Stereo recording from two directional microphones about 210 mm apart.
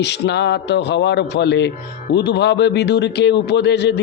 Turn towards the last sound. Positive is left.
turn(degrees=55)  # may be behind; listen again after turning